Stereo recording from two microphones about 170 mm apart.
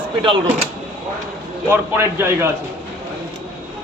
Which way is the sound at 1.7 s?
15° right (ahead or behind).